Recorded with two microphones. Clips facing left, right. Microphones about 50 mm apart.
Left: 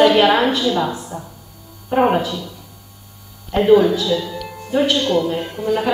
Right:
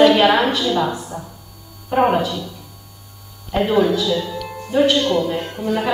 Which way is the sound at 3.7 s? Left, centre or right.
Centre.